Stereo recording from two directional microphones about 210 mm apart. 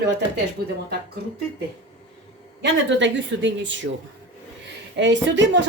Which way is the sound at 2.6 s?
60° right (ahead or behind).